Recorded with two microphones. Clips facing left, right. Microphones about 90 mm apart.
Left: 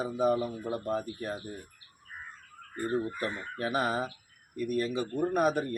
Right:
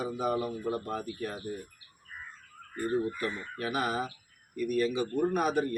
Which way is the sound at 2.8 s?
30° left (ahead or behind).